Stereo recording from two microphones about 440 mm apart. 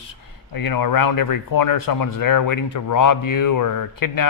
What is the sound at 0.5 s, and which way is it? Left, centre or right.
A man's voice, left.